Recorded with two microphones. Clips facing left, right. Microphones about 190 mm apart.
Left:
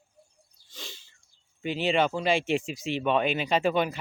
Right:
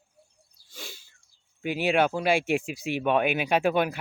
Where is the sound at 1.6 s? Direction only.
10° right (ahead or behind).